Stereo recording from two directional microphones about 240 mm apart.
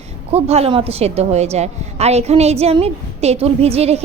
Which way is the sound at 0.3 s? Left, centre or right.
Right.